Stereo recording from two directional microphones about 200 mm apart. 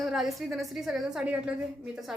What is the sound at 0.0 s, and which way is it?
A woman's voice, centre (ahead or behind).